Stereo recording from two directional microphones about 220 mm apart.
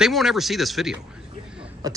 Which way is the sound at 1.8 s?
15° right (ahead or behind).